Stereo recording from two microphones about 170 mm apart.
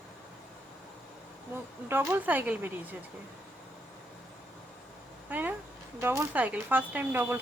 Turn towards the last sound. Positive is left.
turn(degrees=-10)  # may be behind; listen again after turning